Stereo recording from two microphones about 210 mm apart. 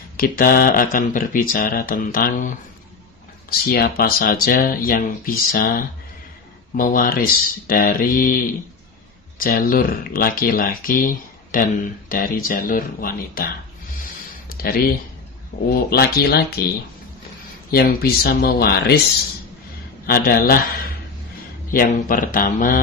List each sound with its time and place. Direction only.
0.2 s speech: 45° left (ahead or behind)
9.4 s speech: 45° left (ahead or behind)
14.6 s speech: 45° left (ahead or behind)
17.6 s speech: 45° left (ahead or behind)
20.1 s speech: 45° left (ahead or behind)
21.7 s speech: 40° left (ahead or behind)